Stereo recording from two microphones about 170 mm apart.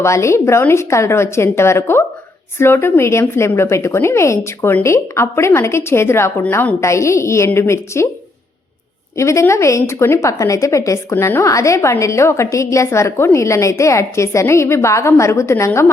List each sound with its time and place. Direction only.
0.0 s a woman's voice: 15° left (ahead or behind)
9.1 s a woman's voice: 15° left (ahead or behind)